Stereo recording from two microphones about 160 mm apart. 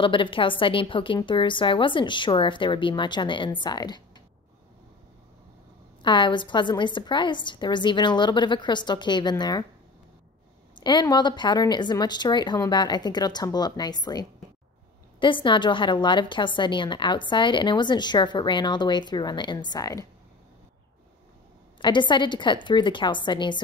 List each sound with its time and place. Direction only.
0.0 s a woman's voice: 30° left (ahead or behind)
6.0 s a woman's voice: 30° left (ahead or behind)
10.7 s a woman's voice: 30° left (ahead or behind)
21.8 s a woman's voice: 30° left (ahead or behind)